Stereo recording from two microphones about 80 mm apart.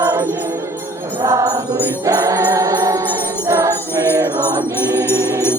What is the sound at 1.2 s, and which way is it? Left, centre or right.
Music, right.